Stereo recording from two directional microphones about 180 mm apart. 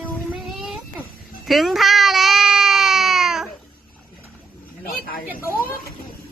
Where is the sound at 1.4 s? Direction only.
Centre (ahead or behind).